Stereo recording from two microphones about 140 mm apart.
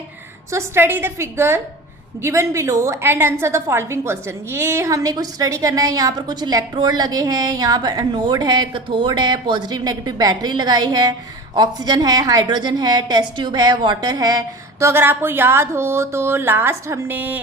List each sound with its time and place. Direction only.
0.5 s a woman's voice: 15° right (ahead or behind)